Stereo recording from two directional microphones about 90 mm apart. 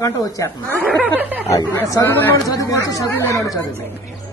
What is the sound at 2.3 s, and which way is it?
Speech, 45° left (ahead or behind).